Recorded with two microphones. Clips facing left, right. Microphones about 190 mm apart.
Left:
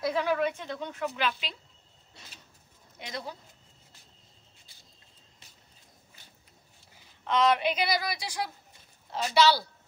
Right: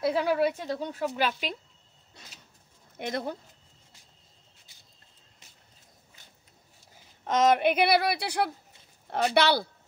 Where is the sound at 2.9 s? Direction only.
55° right (ahead or behind).